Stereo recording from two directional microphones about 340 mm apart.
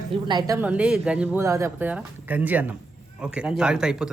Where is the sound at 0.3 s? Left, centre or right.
Centre.